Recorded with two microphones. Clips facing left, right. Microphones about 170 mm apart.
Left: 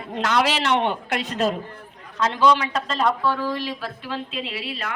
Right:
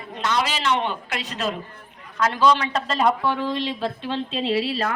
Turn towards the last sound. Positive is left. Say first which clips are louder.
# right 8 dB
turn(degrees=-35)  # may be behind; listen again after turning